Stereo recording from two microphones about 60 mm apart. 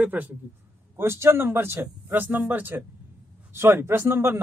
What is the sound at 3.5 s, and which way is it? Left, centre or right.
Speech, right.